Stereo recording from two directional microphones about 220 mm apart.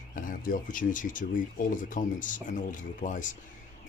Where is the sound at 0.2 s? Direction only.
35° left (ahead or behind).